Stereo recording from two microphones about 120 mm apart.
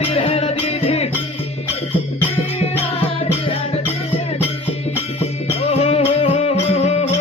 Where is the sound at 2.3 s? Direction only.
55° left (ahead or behind).